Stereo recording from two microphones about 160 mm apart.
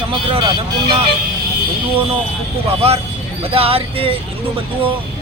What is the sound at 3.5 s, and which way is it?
Speech, 35° right (ahead or behind).